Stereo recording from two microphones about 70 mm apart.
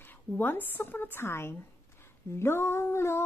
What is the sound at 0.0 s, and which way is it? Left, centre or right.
Speech, left.